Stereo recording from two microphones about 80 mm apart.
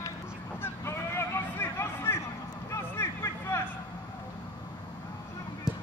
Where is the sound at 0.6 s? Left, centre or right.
Left.